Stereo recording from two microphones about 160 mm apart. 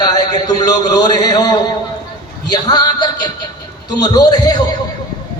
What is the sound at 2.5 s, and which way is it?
Speech, 25° left (ahead or behind).